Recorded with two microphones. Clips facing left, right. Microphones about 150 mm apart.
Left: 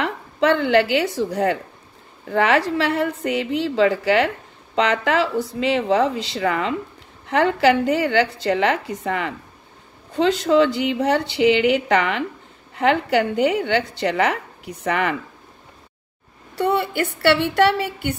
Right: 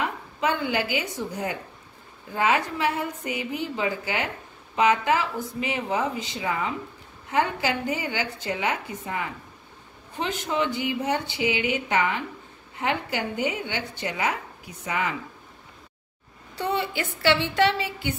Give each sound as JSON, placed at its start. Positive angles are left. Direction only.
{"t": 0.0, "sound": "a woman's voice", "side_deg": 70}
{"t": 16.5, "sound": "a woman's voice", "side_deg": 60}